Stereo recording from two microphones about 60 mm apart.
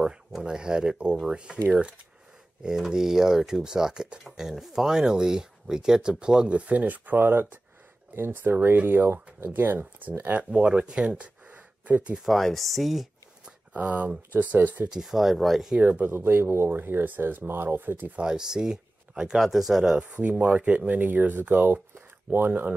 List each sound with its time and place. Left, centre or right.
0.0 s speech: centre
12.2 s speech: centre
13.7 s speech: right
14.9 s speech: centre
15.8 s speech: right
18.2 s speech: centre
19.8 s speech: centre
20.1 s speech: right
21.9 s a sound: right
22.5 s speech: right